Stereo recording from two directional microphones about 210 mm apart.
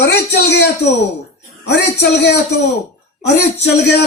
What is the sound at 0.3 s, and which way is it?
Speech, 55° left (ahead or behind).